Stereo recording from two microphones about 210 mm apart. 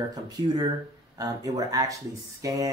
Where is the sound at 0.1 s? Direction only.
20° right (ahead or behind).